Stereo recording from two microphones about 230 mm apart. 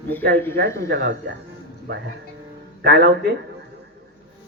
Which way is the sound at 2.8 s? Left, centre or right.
Right.